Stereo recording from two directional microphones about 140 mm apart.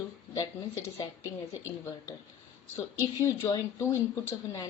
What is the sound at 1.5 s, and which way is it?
Speech, 20° left (ahead or behind).